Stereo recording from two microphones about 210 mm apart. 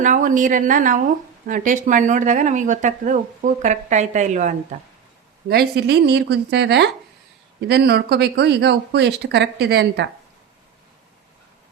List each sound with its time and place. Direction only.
0.0 s speech: 40° right (ahead or behind)
5.5 s speech: 50° right (ahead or behind)